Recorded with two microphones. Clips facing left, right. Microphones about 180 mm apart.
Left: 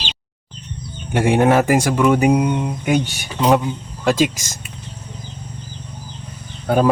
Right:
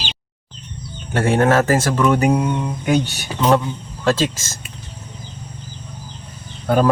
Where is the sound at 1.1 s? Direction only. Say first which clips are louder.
Left 1 dB; 15° left (ahead or behind).